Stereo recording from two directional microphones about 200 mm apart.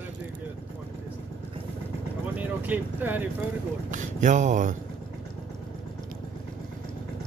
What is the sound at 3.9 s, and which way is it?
Speech, 40° right (ahead or behind).